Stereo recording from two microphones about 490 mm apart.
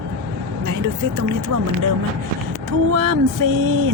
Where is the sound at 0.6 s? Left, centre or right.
Right.